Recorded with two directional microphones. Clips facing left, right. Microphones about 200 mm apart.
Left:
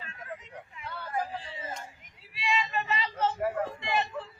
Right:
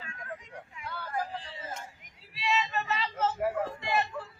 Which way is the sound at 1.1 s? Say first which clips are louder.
Left 2 dB; 5° left (ahead or behind).